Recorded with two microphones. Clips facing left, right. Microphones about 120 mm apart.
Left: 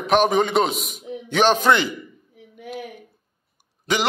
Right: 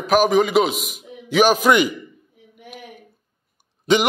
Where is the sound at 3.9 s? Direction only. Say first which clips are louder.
Right 6 dB; 20° right (ahead or behind).